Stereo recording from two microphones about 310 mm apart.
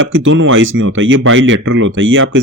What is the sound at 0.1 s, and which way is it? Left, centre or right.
Speech, right.